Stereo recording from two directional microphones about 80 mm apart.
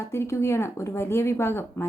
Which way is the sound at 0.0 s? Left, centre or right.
Left.